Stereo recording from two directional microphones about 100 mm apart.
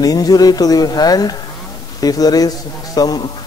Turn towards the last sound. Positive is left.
turn(degrees=40)  # may be behind; listen again after turning